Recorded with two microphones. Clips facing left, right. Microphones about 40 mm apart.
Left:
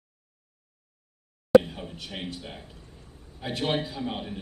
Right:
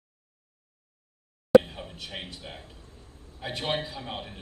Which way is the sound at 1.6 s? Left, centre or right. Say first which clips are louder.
Left 2 dB; centre.